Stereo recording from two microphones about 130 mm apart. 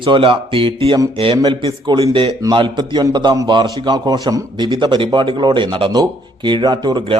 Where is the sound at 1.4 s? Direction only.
35° right (ahead or behind).